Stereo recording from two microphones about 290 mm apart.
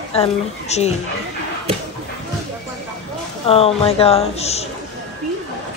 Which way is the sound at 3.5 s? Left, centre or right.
Centre.